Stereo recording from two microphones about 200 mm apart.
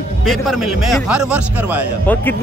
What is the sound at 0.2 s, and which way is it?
A man's voice, centre (ahead or behind).